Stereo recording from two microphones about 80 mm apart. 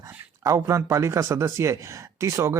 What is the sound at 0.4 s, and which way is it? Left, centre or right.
A man's voice, right.